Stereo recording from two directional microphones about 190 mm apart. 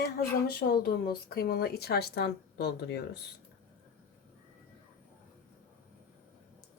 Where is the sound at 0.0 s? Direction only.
55° left (ahead or behind).